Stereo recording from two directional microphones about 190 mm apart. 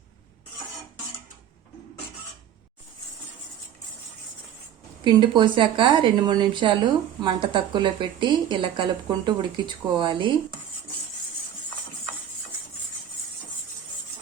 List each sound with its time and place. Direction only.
5.0 s a woman's voice: 25° right (ahead or behind)